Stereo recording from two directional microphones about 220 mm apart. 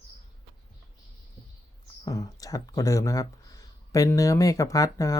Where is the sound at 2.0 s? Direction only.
15° left (ahead or behind).